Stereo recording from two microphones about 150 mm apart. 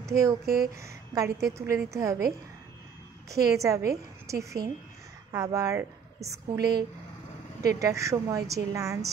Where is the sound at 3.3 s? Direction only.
20° right (ahead or behind).